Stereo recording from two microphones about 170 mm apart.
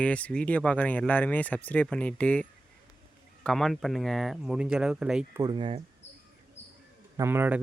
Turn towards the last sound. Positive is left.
turn(degrees=-10)  # may be behind; listen again after turning